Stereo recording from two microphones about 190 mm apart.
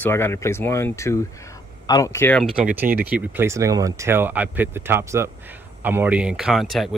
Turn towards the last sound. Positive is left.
turn(degrees=0)  # may be behind; listen again after turning